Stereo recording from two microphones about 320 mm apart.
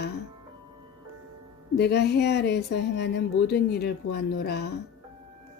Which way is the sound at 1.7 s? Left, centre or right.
Left.